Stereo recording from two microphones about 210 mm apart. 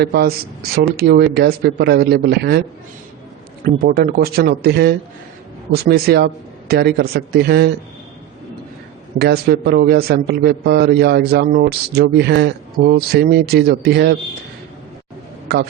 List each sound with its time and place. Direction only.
0.0 s a man's voice: 50° right (ahead or behind)
9.1 s a man's voice: 50° right (ahead or behind)
15.5 s a man's voice: 50° right (ahead or behind)